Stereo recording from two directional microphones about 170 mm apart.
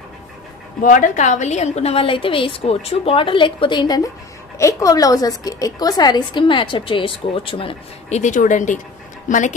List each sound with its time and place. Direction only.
0.8 s a woman's voice: 50° left (ahead or behind); by 8.2 s 30° left (ahead or behind)
8.2 s speech: 45° left (ahead or behind)